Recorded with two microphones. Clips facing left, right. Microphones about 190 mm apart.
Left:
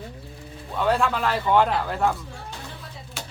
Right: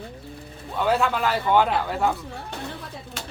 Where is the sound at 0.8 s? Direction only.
Centre (ahead or behind).